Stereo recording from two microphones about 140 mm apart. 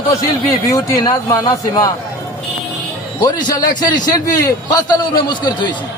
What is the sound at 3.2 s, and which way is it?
Speech, 30° left (ahead or behind).